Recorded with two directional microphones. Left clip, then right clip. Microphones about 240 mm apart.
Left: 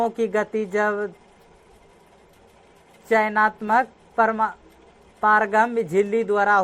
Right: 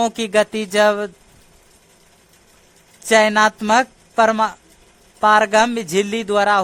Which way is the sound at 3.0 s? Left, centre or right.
Right.